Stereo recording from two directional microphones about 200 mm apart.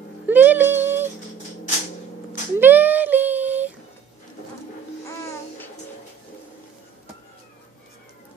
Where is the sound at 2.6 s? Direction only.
10° right (ahead or behind).